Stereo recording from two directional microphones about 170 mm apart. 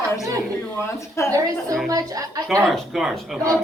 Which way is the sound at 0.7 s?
15° left (ahead or behind).